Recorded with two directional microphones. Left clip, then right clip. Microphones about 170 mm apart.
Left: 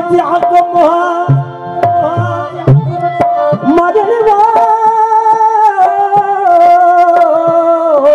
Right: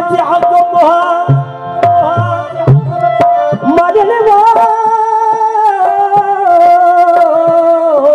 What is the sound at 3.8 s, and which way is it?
Music, 20° right (ahead or behind).